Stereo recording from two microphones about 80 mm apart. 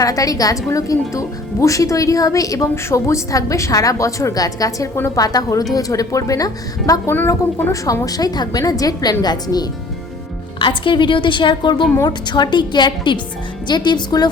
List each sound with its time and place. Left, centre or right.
0.0 s speech: left
10.6 s a woman's voice: left